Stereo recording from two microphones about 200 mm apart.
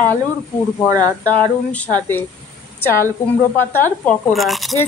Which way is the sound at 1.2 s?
5° left (ahead or behind).